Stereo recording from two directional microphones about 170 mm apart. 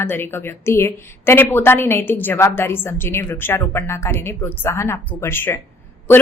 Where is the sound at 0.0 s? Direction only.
15° left (ahead or behind).